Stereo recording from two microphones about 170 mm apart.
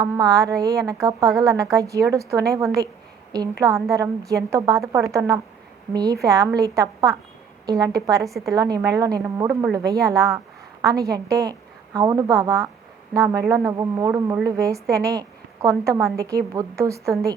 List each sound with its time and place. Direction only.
0.1 s a woman's voice: 20° right (ahead or behind)